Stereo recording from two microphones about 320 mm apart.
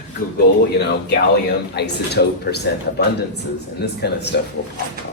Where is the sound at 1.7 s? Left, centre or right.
Left.